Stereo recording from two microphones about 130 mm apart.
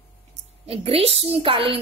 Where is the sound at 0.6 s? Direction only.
45° right (ahead or behind).